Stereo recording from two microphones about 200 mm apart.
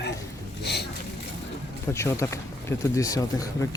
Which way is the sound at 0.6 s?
55° left (ahead or behind).